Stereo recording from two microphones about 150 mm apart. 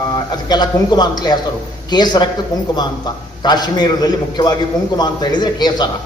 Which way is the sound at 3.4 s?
30° left (ahead or behind).